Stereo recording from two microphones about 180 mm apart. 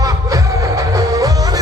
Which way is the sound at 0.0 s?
20° right (ahead or behind).